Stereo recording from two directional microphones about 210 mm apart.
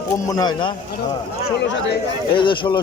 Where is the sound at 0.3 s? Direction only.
20° left (ahead or behind).